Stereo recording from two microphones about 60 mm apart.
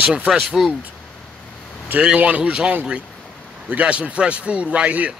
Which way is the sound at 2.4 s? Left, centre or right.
Centre.